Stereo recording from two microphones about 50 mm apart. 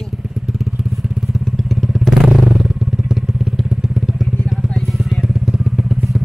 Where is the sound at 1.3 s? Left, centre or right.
Centre.